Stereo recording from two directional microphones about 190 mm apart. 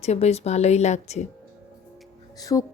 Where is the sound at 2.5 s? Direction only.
20° left (ahead or behind).